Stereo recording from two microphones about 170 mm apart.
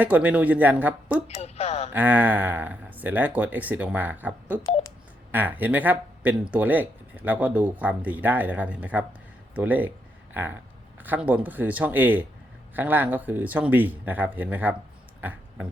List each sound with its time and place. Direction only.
0.0 s speech: 10° right (ahead or behind)
1.3 s speech: 40° left (ahead or behind)
1.9 s speech: 10° right (ahead or behind)
15.2 s a sound: 10° right (ahead or behind)